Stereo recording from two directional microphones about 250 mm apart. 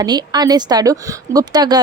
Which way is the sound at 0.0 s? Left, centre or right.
Centre.